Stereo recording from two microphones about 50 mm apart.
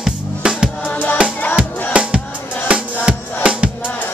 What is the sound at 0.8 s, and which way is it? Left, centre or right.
Music, left.